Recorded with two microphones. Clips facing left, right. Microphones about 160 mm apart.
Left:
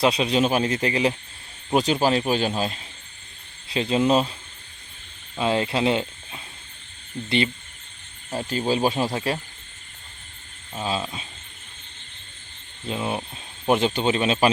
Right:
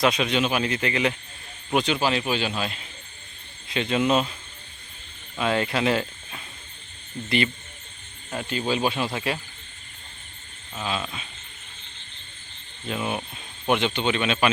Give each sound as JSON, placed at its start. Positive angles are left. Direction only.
{"t": 0.0, "sound": "speech", "side_deg": 30}
{"t": 5.4, "sound": "speech", "side_deg": 25}
{"t": 10.8, "sound": "speech", "side_deg": 35}
{"t": 12.9, "sound": "speech", "side_deg": 25}